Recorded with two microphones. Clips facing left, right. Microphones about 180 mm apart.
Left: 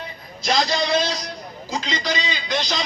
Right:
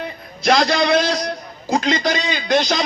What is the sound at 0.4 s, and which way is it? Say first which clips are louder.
A man's voice: right 6 dB; 60° right (ahead or behind).